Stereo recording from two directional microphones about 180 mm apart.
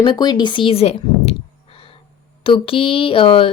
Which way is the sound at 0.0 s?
25° left (ahead or behind).